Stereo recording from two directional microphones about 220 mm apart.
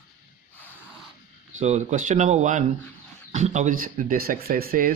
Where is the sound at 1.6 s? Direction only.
30° right (ahead or behind).